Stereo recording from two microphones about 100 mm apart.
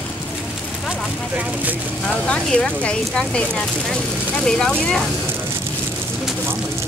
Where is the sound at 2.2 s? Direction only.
10° left (ahead or behind).